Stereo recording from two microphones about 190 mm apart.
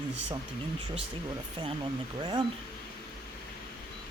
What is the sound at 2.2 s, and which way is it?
Speech, 25° right (ahead or behind).